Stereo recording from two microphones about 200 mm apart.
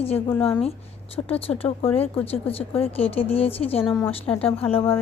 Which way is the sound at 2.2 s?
30° left (ahead or behind).